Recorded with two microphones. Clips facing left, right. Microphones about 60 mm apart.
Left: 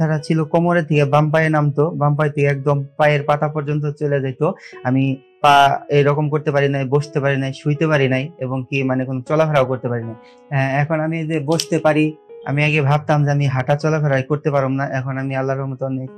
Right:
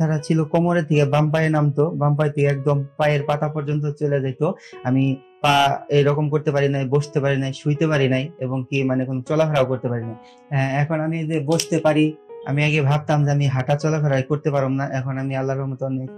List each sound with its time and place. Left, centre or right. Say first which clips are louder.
0.0 s speech: left 2 dB; left